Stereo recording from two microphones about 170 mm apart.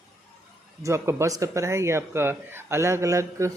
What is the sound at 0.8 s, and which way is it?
Speech, 15° right (ahead or behind).